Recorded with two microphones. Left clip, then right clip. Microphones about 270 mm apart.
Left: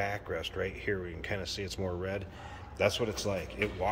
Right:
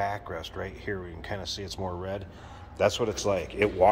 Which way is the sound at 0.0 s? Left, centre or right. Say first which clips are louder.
Right 3 dB; centre.